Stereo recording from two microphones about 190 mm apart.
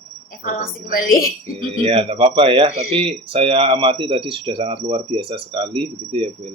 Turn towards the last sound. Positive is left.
turn(degrees=-30)  # may be behind; listen again after turning